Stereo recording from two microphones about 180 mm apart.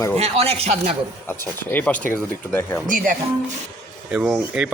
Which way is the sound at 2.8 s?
50° right (ahead or behind).